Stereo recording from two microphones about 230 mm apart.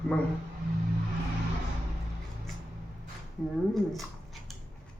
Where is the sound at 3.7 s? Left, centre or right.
Centre.